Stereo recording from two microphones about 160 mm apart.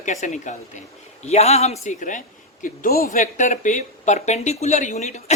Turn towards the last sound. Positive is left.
turn(degrees=45)  # may be behind; listen again after turning